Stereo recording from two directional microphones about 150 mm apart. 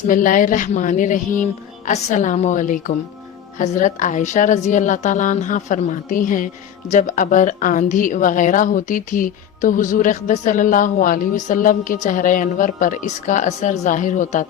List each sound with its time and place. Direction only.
0.1 s a woman's voice: 65° left (ahead or behind)